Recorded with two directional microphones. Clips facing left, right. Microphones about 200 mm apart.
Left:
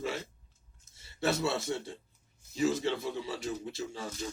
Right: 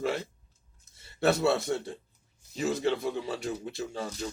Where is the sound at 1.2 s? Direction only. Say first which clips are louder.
Right 6 dB; 60° right (ahead or behind).